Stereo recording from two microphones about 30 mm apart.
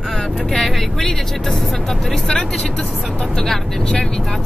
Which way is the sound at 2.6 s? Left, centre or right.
Left.